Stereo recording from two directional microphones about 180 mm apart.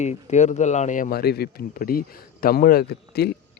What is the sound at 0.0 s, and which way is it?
Speech, 40° left (ahead or behind).